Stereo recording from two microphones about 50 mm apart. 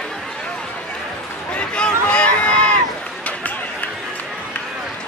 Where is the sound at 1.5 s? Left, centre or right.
Left.